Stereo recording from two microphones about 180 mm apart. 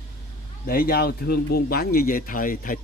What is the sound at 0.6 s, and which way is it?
A man's voice, 55° left (ahead or behind).